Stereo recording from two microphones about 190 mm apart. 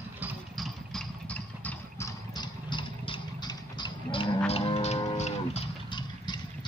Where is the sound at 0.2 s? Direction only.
5° right (ahead or behind); by 4.3 s 25° left (ahead or behind).